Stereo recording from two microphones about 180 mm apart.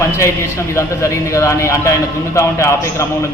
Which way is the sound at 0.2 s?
15° left (ahead or behind).